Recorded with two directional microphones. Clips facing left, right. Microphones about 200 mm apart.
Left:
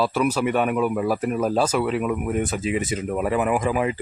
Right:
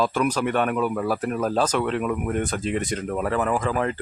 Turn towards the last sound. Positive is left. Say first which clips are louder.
# left 2 dB
turn(degrees=10)  # may be behind; listen again after turning